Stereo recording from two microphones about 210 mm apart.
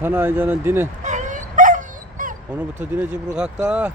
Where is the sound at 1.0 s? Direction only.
35° right (ahead or behind).